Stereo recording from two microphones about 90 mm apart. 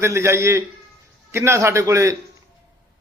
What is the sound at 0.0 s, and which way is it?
A man's voice, 30° right (ahead or behind).